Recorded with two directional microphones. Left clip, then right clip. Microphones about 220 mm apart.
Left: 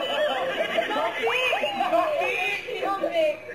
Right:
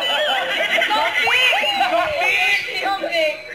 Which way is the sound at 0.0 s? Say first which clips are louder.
Right 6 dB; 15° right (ahead or behind).